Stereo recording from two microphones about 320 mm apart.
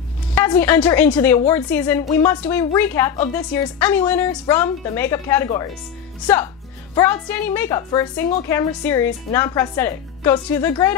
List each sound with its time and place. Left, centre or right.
0.3 s a woman's voice: centre